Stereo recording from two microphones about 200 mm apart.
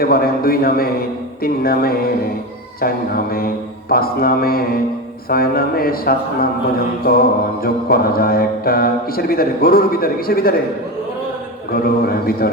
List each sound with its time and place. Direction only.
0.0 s speech: 50° left (ahead or behind)
11.7 s speech: 50° left (ahead or behind)